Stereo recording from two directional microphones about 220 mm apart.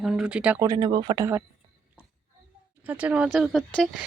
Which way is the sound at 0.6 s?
15° right (ahead or behind).